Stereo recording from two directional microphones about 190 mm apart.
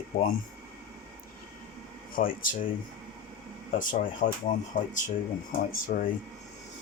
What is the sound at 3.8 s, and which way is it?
Speech, 45° left (ahead or behind).